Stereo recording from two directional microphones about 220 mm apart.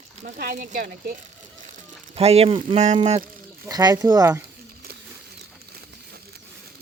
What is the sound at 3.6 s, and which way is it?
Speech, 15° right (ahead or behind).